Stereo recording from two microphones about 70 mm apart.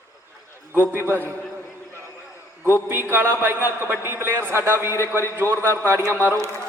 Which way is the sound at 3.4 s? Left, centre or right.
Right.